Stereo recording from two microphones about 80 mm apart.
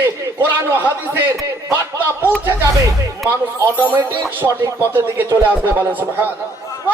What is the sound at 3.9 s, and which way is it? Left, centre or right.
Music, right.